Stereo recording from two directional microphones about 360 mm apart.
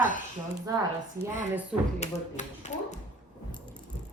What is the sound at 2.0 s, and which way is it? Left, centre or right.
Speech, centre.